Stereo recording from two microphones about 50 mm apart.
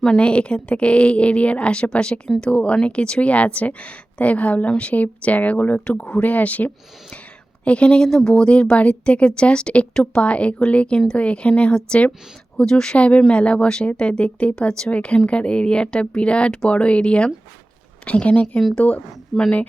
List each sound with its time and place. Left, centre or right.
0.2 s speech: left
12.5 s speech: centre
13.0 s speech: left
19.3 s a woman's voice: centre